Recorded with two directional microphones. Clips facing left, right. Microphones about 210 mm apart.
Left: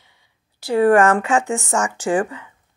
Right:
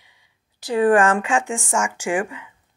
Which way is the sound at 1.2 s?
35° left (ahead or behind).